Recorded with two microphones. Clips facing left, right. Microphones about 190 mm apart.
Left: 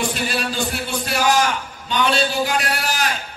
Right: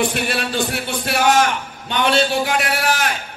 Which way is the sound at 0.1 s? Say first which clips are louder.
Right 2 dB; 60° right (ahead or behind).